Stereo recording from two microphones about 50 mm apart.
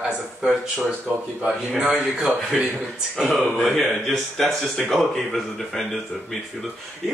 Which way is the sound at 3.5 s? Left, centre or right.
Centre.